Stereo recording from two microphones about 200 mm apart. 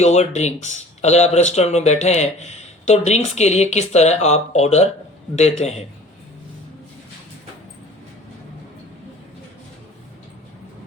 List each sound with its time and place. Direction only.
0.0 s speech: 35° left (ahead or behind)